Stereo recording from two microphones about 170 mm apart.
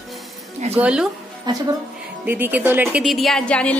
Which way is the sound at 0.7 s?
5° right (ahead or behind).